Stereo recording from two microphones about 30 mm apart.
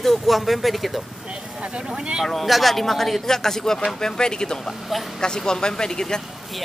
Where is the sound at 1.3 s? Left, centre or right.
Right.